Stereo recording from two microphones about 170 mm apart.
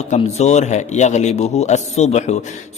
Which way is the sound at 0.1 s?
40° left (ahead or behind).